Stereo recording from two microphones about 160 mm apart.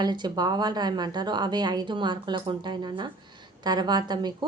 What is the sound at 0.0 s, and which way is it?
A woman's voice, 25° right (ahead or behind).